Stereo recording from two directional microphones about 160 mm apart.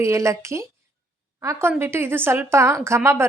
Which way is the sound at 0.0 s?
20° right (ahead or behind).